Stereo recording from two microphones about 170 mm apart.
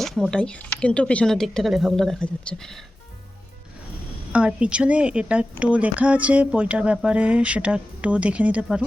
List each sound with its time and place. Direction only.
0.0 s speech: centre (ahead or behind)
4.3 s a woman's voice: 5° right (ahead or behind)